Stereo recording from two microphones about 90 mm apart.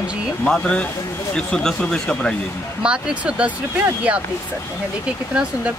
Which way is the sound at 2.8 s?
10° right (ahead or behind).